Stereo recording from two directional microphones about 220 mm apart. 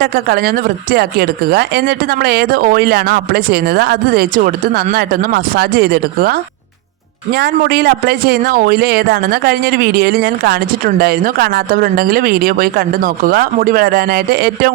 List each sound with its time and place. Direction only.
0.0 s a man's voice: 45° right (ahead or behind)